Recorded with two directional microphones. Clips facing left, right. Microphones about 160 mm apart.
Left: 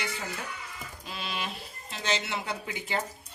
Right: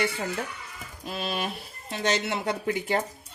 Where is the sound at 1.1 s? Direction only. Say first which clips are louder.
Right 6 dB; 50° right (ahead or behind).